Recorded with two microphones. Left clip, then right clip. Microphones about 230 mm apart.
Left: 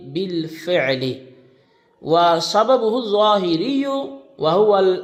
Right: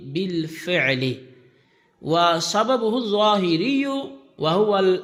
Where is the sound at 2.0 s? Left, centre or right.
Right.